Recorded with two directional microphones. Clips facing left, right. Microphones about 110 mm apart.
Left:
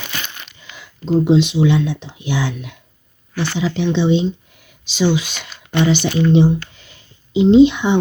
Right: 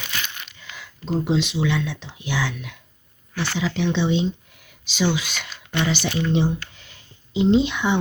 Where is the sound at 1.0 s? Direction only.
Centre (ahead or behind).